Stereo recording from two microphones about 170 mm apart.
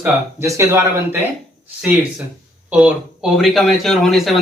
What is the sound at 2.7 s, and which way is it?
Speech, 5° right (ahead or behind).